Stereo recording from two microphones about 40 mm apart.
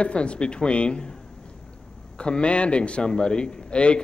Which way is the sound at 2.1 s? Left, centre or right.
Left.